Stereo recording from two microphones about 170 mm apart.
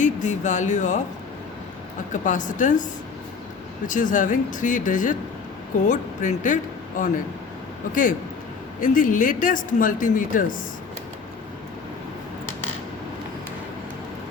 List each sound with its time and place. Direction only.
0.0 s speech: 45° left (ahead or behind)
2.2 s speech: 50° left (ahead or behind)
8.8 s speech: 50° left (ahead or behind)